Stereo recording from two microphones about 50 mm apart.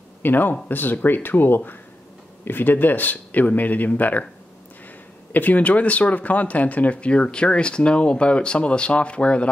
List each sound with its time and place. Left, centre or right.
0.2 s speech: left
5.3 s speech: left